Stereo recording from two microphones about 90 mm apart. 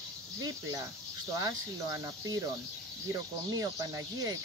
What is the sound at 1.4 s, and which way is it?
Speech, 40° right (ahead or behind).